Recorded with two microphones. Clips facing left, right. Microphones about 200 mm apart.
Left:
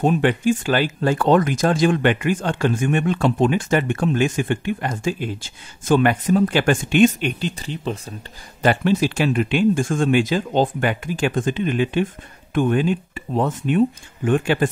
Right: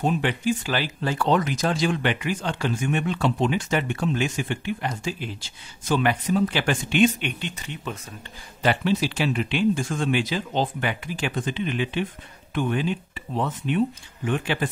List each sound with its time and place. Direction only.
0.0 s speech: 50° left (ahead or behind); by 8.0 s 30° left (ahead or behind)
8.6 s speech: 50° left (ahead or behind)